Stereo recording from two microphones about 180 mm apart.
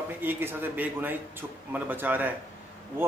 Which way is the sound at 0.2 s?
10° right (ahead or behind).